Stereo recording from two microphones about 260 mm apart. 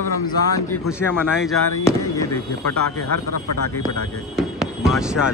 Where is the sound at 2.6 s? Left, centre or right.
Left.